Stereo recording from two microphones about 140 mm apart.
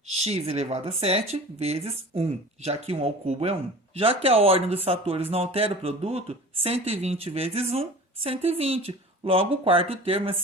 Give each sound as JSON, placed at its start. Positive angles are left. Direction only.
{"t": 0.1, "sound": "speech", "side_deg": -50}